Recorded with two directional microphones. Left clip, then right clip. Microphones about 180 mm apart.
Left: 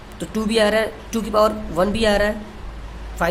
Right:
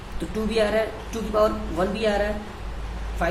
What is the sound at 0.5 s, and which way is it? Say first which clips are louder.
A man's voice: left 5 dB; 50° left (ahead or behind).